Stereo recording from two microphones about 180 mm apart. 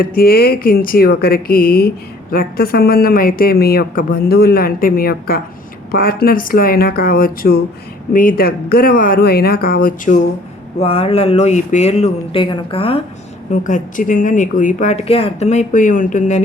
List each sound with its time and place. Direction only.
0.0 s speech: 55° left (ahead or behind)
10.8 s speech: 35° left (ahead or behind)
13.5 s speech: 45° left (ahead or behind)